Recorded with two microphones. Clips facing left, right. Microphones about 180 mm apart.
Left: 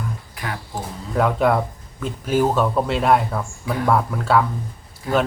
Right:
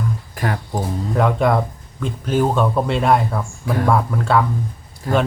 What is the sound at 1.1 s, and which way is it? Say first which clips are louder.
Speech: right 1 dB; centre (ahead or behind).